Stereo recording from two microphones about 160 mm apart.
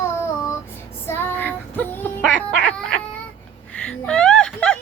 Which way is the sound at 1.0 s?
15° left (ahead or behind).